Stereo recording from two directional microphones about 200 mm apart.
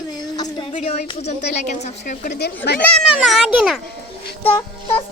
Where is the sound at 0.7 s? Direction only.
35° left (ahead or behind).